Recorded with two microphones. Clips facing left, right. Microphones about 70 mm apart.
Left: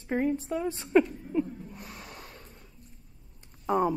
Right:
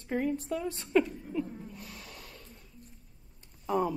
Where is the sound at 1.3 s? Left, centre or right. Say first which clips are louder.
Left 6 dB; left.